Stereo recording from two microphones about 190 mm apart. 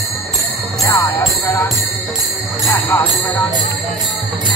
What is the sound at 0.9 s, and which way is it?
Jingle bell, 15° left (ahead or behind).